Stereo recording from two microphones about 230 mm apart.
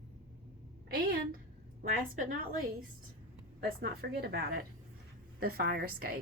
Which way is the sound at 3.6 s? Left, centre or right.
Right.